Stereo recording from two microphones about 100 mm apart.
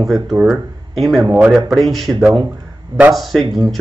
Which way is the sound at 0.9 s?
Centre (ahead or behind).